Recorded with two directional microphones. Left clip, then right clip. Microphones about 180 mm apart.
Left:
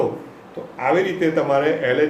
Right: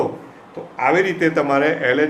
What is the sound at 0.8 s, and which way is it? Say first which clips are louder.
A man's voice: right 2 dB; 30° right (ahead or behind).